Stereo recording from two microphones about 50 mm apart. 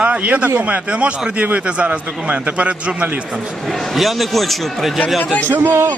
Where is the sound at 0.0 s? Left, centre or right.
Right.